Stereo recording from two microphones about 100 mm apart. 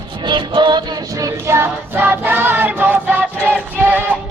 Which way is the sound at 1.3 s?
25° right (ahead or behind).